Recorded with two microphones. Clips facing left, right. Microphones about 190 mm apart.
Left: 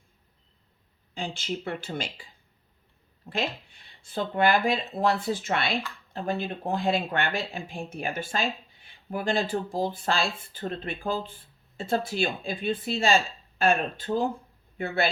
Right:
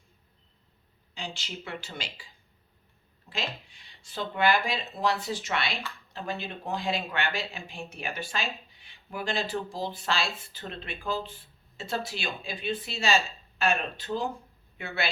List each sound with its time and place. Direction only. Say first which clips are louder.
1.1 s speech: left 7 dB; 50° left (ahead or behind)
3.3 s speech: left 6 dB; 40° left (ahead or behind)
3.8 s speech: left 4 dB; 50° left (ahead or behind)